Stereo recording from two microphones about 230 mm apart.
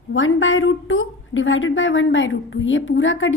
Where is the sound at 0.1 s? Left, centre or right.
Left.